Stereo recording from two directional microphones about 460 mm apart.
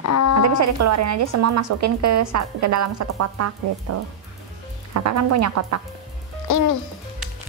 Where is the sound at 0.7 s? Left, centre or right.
Right.